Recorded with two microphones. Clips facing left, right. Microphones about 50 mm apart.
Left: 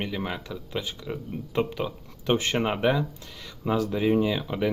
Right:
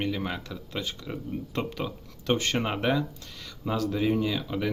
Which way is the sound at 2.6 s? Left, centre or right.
Centre.